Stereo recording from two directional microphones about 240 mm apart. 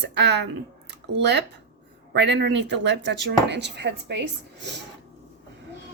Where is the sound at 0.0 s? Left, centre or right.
Right.